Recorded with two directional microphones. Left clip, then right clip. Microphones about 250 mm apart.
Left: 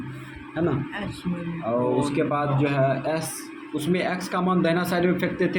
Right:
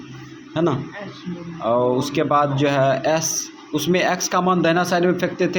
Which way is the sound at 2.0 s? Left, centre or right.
Right.